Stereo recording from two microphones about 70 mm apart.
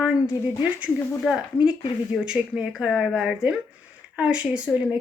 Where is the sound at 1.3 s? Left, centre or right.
Centre.